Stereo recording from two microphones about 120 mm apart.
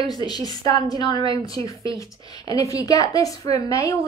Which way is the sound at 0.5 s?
35° left (ahead or behind).